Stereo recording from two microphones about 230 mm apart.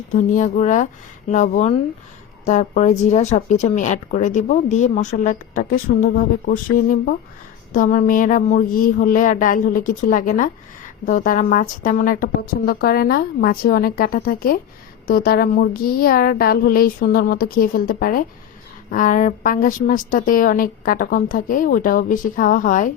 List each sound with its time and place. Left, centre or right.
0.1 s speech: left